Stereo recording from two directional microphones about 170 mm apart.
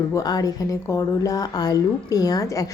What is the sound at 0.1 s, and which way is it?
Speech, 20° left (ahead or behind).